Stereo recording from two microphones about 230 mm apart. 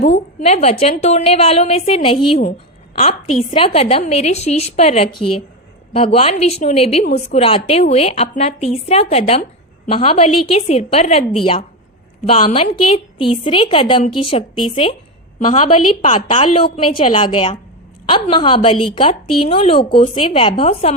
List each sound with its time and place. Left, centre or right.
0.0 s a woman's voice: left